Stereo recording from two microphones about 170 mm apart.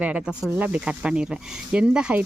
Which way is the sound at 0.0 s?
5° right (ahead or behind).